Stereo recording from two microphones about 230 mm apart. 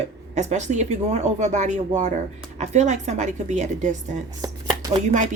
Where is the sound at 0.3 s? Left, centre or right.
Right.